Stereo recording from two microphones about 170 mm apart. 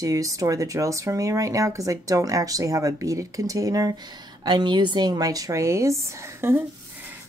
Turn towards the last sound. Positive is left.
turn(degrees=-15)  # may be behind; listen again after turning